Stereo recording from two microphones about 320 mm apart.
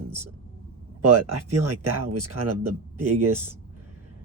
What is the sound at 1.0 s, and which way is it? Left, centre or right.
Speech, right.